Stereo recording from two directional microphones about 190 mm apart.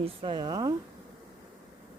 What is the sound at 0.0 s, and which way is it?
Speech, 25° right (ahead or behind).